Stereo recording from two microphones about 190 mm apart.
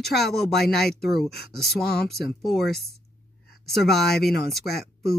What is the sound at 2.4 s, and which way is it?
Speech, centre (ahead or behind).